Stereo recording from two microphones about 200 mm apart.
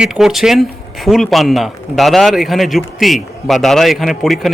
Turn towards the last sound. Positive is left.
turn(degrees=0)  # may be behind; listen again after turning